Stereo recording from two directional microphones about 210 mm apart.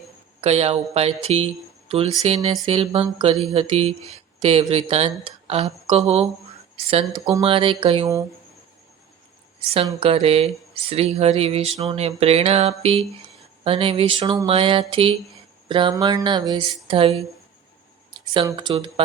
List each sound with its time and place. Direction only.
0.4 s speech: 30° right (ahead or behind)
6.7 s speech: 30° right (ahead or behind)
9.6 s speech: 25° right (ahead or behind)